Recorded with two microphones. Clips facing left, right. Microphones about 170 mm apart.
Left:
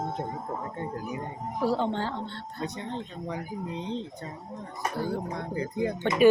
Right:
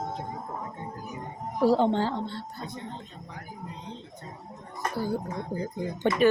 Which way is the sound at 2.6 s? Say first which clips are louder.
Left 4 dB; 80° left.